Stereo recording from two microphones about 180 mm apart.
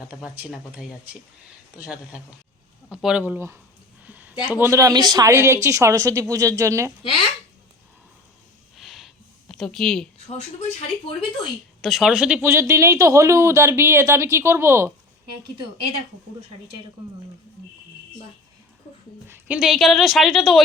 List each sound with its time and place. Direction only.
0.2 s a woman's voice: centre (ahead or behind)
2.9 s speech: 5° right (ahead or behind)
4.0 s a sound: 10° right (ahead or behind)
4.4 s speech: 10° right (ahead or behind)
8.7 s a sound: centre (ahead or behind)
10.2 s speech: 35° left (ahead or behind)
11.8 s speech: centre (ahead or behind)
19.3 s a woman's voice: 5° right (ahead or behind)